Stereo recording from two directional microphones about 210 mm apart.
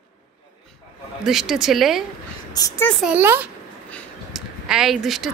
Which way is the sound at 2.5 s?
15° left (ahead or behind).